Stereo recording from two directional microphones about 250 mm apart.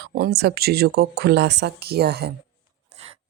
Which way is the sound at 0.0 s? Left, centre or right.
Right.